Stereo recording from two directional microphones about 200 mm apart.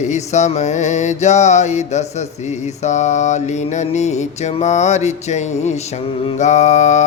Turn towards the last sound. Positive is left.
turn(degrees=35)  # may be behind; listen again after turning